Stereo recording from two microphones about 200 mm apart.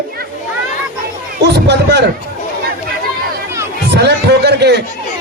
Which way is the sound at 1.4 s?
55° right (ahead or behind).